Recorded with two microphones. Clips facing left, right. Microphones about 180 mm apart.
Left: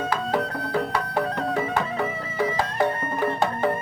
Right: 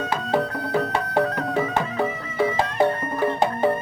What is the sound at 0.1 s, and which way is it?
Music, 25° right (ahead or behind).